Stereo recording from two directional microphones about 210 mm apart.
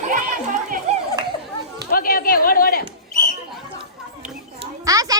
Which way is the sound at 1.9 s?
45° left (ahead or behind).